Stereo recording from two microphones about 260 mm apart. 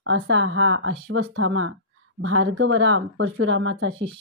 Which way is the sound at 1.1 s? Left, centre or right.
Right.